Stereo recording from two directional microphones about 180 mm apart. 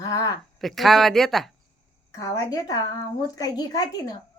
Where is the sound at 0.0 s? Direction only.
20° left (ahead or behind).